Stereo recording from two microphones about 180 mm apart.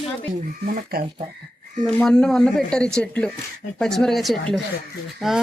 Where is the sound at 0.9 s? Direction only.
60° right (ahead or behind).